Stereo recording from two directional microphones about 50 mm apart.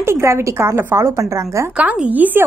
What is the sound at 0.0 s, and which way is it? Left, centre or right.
A woman's voice, right.